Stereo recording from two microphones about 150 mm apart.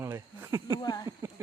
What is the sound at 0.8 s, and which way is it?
Speech, 25° left (ahead or behind).